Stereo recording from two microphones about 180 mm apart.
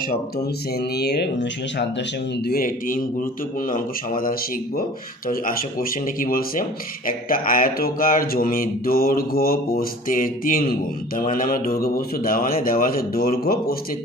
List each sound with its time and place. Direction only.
0.9 s speech: 65° left (ahead or behind)
2.4 s mantra: 55° left (ahead or behind)